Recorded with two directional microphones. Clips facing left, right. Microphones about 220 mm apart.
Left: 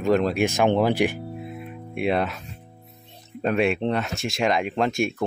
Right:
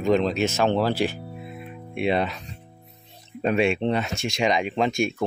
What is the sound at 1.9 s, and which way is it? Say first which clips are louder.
Speech: even; centre (ahead or behind).